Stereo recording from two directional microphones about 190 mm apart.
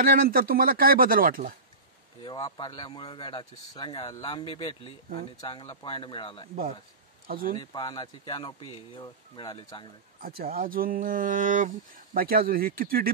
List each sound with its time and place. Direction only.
0.0 s speech: 50° right (ahead or behind)
2.2 s speech: 20° left (ahead or behind)
7.2 s speech: 50° right (ahead or behind)
7.5 s speech: 25° left (ahead or behind)
10.2 s speech: 50° right (ahead or behind)